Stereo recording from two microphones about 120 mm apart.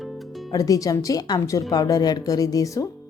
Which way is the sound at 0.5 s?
30° left (ahead or behind).